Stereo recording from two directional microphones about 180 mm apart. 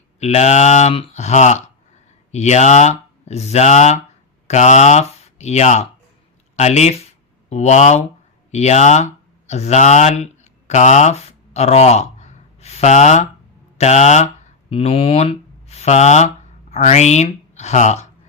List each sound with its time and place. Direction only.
0.2 s speech: 40° left (ahead or behind)